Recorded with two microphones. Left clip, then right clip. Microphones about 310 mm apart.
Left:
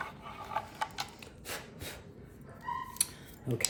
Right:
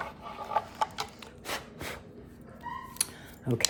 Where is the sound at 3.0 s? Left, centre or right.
Right.